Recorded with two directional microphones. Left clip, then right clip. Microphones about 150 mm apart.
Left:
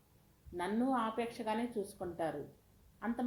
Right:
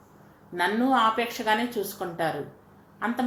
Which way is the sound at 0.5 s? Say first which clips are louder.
Right 12 dB; 30° left (ahead or behind).